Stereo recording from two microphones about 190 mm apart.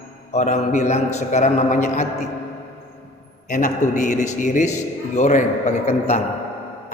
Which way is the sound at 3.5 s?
45° left (ahead or behind).